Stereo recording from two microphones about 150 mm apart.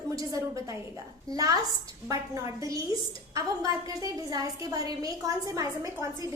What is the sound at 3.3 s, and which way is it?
A woman's voice, 25° right (ahead or behind).